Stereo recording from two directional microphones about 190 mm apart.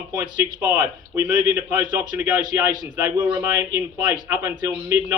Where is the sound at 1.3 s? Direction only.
5° right (ahead or behind).